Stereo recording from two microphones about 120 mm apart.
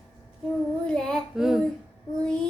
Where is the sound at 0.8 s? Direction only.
5° left (ahead or behind).